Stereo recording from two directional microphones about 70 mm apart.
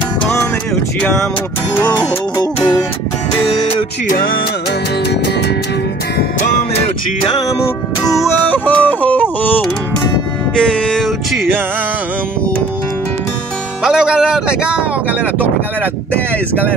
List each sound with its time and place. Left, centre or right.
1.8 s music: left
8.0 s music: left
8.5 s music: left
10.5 s a sound: centre
13.8 s speech: centre